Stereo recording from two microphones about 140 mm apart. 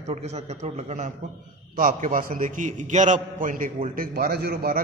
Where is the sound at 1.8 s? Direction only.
70° right (ahead or behind).